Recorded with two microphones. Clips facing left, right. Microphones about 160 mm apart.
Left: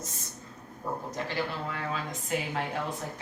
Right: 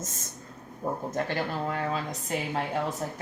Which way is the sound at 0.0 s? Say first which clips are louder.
Right 2 dB; 45° right (ahead or behind).